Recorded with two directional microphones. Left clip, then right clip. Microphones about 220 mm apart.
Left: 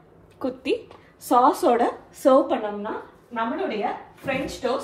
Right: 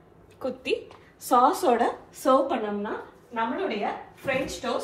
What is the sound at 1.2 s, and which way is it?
A woman's voice, 45° left (ahead or behind).